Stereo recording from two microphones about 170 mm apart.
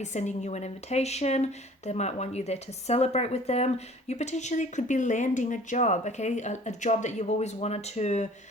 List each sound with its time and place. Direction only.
0.0 s speech: 45° left (ahead or behind)